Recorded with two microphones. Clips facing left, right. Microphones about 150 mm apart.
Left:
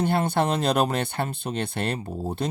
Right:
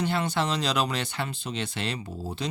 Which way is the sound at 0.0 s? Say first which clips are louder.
Left 4 dB; 50° left (ahead or behind).